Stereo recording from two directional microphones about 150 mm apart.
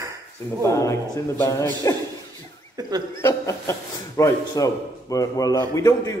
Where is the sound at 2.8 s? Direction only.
25° right (ahead or behind).